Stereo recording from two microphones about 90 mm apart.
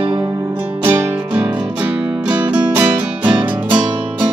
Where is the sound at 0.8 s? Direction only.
25° right (ahead or behind).